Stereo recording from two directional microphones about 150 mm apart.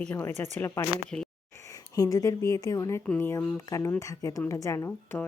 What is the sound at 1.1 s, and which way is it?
Speech, 10° left (ahead or behind).